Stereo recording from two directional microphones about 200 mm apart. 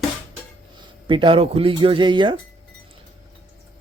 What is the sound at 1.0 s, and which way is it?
Speech, 25° right (ahead or behind).